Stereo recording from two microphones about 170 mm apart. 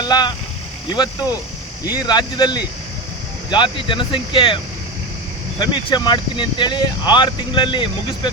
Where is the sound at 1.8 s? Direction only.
25° left (ahead or behind).